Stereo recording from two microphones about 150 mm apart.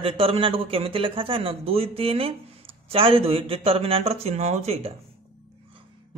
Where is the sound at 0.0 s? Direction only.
40° right (ahead or behind).